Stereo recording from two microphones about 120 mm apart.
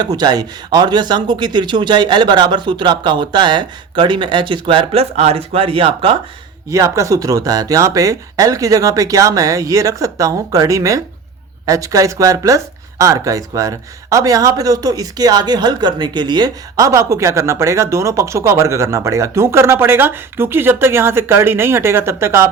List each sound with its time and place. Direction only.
0.0 s speech: 35° right (ahead or behind)
6.7 s speech: 25° right (ahead or behind)